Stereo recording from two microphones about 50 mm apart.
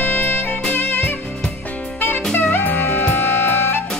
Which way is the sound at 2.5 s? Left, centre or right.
Left.